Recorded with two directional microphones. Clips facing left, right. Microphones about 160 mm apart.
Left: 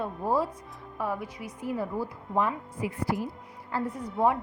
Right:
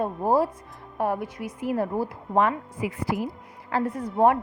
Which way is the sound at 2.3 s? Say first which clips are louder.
Right 5 dB; 85° right.